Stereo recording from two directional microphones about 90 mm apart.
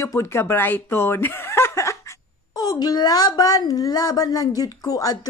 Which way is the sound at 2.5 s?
45° left (ahead or behind).